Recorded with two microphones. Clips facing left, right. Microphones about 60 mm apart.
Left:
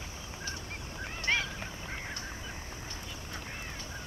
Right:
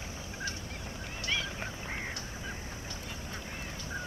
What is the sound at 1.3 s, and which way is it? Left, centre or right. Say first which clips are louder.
Goose: left 4 dB; left.